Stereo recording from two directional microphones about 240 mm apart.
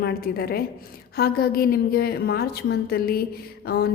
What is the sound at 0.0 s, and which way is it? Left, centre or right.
A woman's voice, left.